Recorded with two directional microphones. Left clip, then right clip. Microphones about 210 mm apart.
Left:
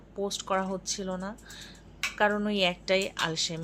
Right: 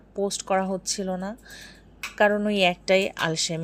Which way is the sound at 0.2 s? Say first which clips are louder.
Right 5 dB; 30° right (ahead or behind).